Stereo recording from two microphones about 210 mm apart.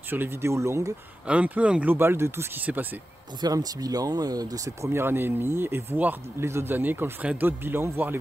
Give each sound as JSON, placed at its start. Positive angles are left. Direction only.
{"t": 0.1, "sound": "speech", "side_deg": -10}